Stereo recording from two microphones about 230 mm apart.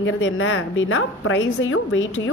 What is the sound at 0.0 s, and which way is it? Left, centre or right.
A woman's voice, left.